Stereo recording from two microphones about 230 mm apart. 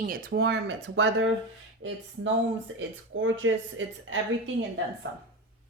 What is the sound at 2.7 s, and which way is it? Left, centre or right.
A woman's voice, right.